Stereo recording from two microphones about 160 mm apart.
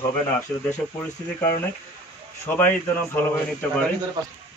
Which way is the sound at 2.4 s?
10° left (ahead or behind).